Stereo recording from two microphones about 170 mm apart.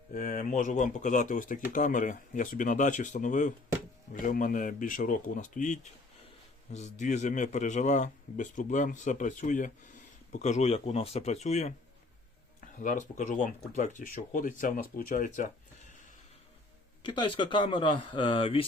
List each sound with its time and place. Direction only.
0.1 s a man's voice: 50° left (ahead or behind)
17.0 s speech: 30° left (ahead or behind)